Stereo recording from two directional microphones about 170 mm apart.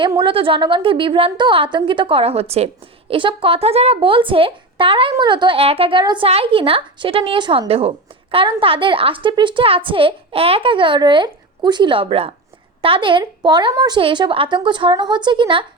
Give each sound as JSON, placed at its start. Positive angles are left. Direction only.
{"t": 0.2, "sound": "a woman's voice", "side_deg": -30}